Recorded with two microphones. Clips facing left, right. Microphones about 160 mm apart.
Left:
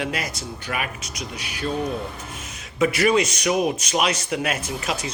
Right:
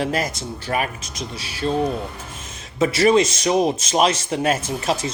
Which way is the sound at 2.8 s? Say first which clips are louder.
Right 3 dB; 30° right (ahead or behind).